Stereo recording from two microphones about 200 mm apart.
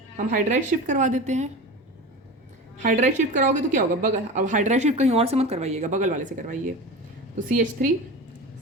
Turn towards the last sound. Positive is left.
turn(degrees=-40)  # may be behind; listen again after turning